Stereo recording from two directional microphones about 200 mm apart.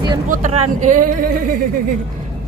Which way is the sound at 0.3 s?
35° right (ahead or behind).